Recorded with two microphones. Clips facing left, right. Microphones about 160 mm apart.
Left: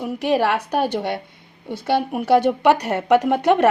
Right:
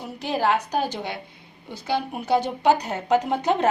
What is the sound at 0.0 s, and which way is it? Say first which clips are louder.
A woman's voice: left 5 dB; 70° left (ahead or behind).